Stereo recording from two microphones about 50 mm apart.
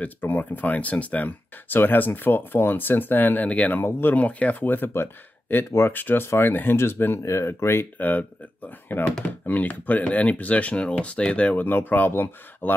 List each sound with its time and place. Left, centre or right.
0.0 s speech: left
3.4 s speech: left
3.7 s speech: left
4.1 s speech: left
4.9 s speech: left
5.9 s speech: left
7.2 s speech: left
8.0 s speech: left
11.5 s speech: left